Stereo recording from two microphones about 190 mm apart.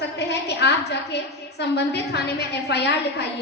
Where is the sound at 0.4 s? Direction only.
65° left (ahead or behind).